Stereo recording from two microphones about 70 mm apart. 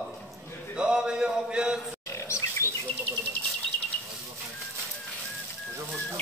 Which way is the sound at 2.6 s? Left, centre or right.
Left.